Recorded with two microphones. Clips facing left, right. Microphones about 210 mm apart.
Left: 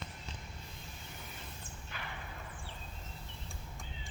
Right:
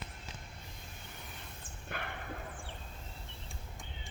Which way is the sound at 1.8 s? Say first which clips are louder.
Right 6 dB; 55° right (ahead or behind).